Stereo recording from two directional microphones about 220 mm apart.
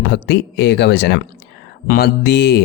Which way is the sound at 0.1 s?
50° left (ahead or behind).